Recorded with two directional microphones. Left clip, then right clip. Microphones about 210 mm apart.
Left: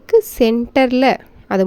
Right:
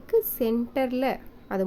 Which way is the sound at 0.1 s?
35° left (ahead or behind).